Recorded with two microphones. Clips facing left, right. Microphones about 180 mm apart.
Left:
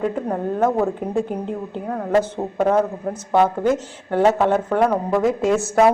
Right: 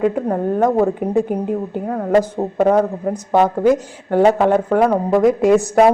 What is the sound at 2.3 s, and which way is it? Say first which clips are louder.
A woman's voice: right 4 dB; 15° right (ahead or behind).